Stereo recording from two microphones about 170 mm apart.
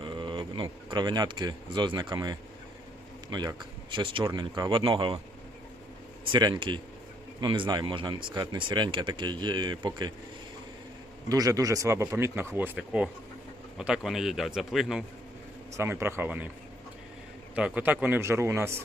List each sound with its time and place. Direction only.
0.0 s speech: 30° right (ahead or behind)
6.3 s speech: 25° right (ahead or behind)
11.3 s speech: 20° right (ahead or behind); by 15.0 s centre (ahead or behind)
15.8 s speech: 15° right (ahead or behind)
17.5 s speech: 10° right (ahead or behind)